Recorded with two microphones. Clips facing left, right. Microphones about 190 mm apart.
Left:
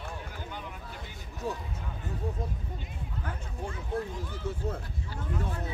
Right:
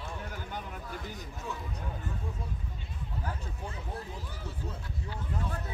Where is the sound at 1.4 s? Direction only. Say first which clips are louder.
Left 6 dB; 35° left (ahead or behind).